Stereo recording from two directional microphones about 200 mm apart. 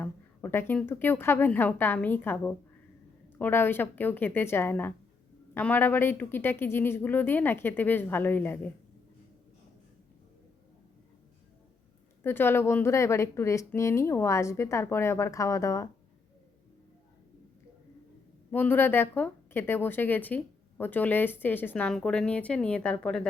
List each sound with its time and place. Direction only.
0.0 s a woman's voice: 10° left (ahead or behind)
12.2 s a woman's voice: 10° left (ahead or behind)
18.5 s a woman's voice: 10° left (ahead or behind)